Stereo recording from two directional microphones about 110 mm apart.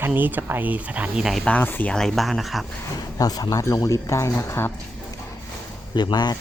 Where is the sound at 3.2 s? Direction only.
35° left (ahead or behind).